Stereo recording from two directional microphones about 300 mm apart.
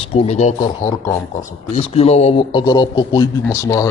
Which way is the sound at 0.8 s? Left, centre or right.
Centre.